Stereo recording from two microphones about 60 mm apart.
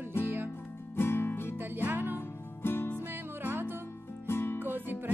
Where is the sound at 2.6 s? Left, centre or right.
Left.